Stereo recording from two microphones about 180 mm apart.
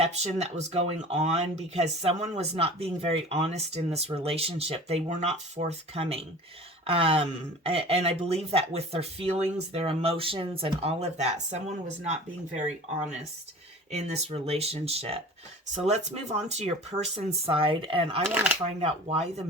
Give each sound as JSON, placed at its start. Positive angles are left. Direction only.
{"t": 0.0, "sound": "speech", "side_deg": -35}
{"t": 13.9, "sound": "speech", "side_deg": -35}
{"t": 18.3, "sound": "speech", "side_deg": -10}
{"t": 18.8, "sound": "speech", "side_deg": -35}